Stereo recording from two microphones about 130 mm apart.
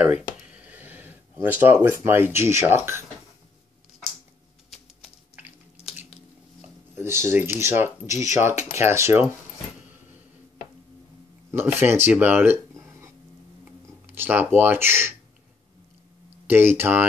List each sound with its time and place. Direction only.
0.0 s speech: 10° right (ahead or behind)
6.6 s speech: 20° right (ahead or behind)
11.5 s speech: 15° right (ahead or behind)
13.7 s a sound: 15° right (ahead or behind)
16.4 s speech: 15° right (ahead or behind)